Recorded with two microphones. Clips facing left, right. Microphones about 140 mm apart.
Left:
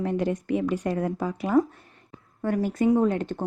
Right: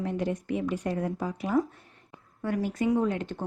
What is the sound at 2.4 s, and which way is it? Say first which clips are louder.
Speech: left 4 dB; 50° left (ahead or behind).